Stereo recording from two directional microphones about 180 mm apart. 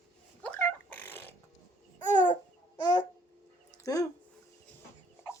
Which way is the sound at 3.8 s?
20° left (ahead or behind).